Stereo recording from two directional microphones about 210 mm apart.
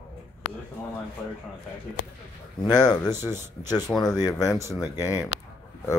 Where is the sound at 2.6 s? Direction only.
20° left (ahead or behind).